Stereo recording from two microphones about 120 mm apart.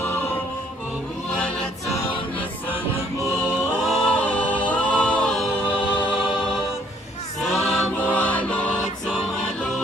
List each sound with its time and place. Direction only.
0.0 s music: 20° left (ahead or behind)
1.3 s choir: 5° left (ahead or behind)
3.8 s a capella: 5° left (ahead or behind)
5.5 s a capella: 15° left (ahead or behind)
6.1 s choir: 5° right (ahead or behind); by 8.5 s 10° left (ahead or behind)